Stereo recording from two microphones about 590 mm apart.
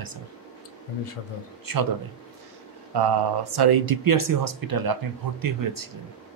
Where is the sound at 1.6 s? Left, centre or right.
Right.